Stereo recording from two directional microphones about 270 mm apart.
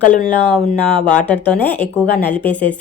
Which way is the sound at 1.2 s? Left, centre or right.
Centre.